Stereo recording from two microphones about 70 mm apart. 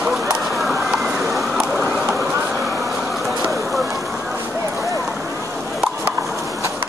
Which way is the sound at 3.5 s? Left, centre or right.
Centre.